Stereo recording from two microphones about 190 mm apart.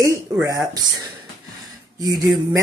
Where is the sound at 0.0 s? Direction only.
15° right (ahead or behind).